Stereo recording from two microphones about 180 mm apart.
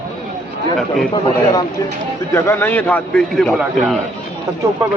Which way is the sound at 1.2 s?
20° left (ahead or behind).